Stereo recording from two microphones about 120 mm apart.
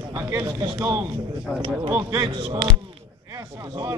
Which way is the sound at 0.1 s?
25° right (ahead or behind).